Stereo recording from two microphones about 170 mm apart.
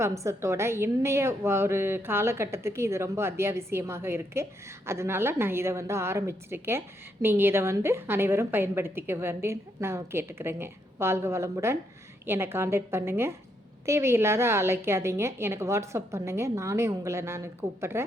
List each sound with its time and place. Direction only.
0.0 s a woman's voice: 15° right (ahead or behind)